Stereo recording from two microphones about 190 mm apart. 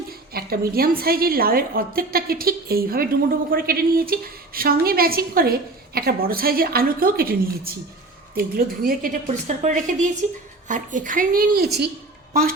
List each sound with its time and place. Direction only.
0.3 s a woman's voice: 55° right (ahead or behind)